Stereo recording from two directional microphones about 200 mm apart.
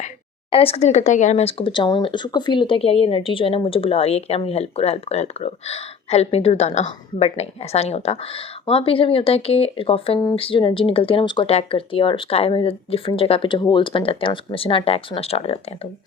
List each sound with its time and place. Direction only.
0.5 s speech: 30° left (ahead or behind)